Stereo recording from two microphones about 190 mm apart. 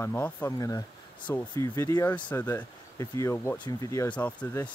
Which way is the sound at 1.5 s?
20° left (ahead or behind).